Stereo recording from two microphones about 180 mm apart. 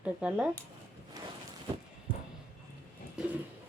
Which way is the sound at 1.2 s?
20° right (ahead or behind).